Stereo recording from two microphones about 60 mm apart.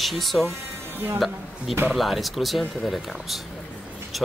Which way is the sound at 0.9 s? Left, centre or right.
Right.